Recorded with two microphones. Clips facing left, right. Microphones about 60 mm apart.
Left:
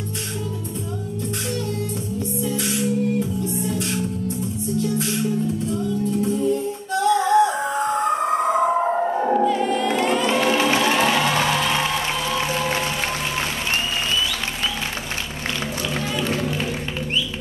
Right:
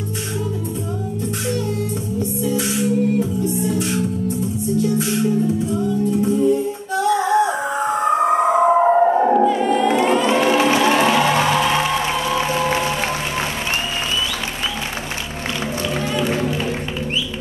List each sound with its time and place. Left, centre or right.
2.1 s music: centre